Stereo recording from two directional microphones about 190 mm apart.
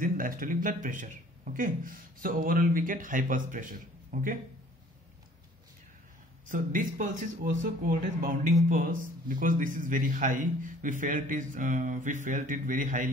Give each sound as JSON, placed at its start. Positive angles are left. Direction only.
{"t": 0.0, "sound": "a man's voice", "side_deg": -45}
{"t": 6.5, "sound": "a man's voice", "side_deg": -45}